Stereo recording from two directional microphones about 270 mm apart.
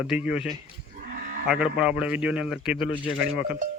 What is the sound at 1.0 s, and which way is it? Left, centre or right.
Livestock, right.